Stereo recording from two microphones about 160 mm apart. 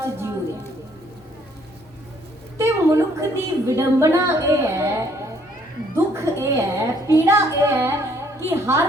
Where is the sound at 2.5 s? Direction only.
15° right (ahead or behind).